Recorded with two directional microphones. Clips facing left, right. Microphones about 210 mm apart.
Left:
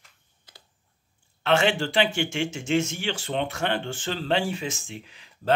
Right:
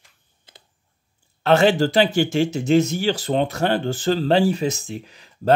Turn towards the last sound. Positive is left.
turn(degrees=-40)  # may be behind; listen again after turning